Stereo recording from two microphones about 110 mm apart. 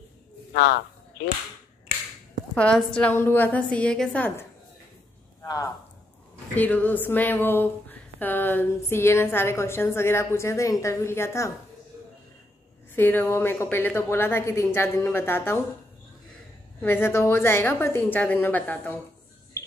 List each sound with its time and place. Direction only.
2.5 s a woman's voice: 10° left (ahead or behind)
5.4 s speech: 30° left (ahead or behind)
6.5 s speech: 15° left (ahead or behind)
12.9 s speech: 20° left (ahead or behind)
16.8 s speech: 20° left (ahead or behind)